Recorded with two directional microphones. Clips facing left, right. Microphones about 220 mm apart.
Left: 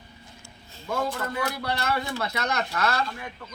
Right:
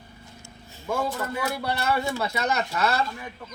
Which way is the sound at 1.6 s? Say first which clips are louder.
Right 2 dB; 10° right (ahead or behind).